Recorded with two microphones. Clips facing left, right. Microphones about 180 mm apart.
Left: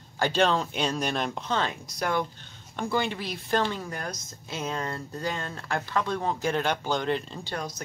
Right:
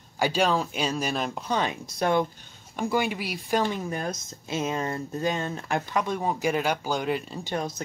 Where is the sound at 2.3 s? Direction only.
10° right (ahead or behind).